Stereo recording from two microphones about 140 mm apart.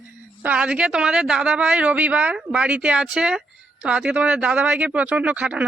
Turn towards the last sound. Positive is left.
turn(degrees=-10)  # may be behind; listen again after turning